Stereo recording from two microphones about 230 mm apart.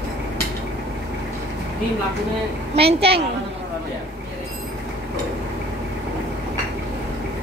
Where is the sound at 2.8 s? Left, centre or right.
Right.